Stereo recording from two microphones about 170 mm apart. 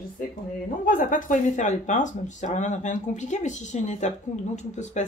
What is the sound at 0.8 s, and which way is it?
Speech, 50° left (ahead or behind).